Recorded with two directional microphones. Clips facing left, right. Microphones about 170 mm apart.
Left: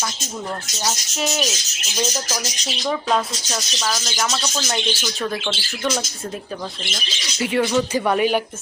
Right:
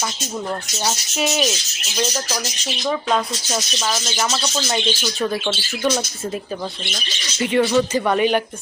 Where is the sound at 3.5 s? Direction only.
15° right (ahead or behind).